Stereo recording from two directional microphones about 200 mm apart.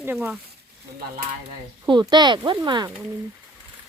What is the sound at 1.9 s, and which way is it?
Speech, 20° right (ahead or behind).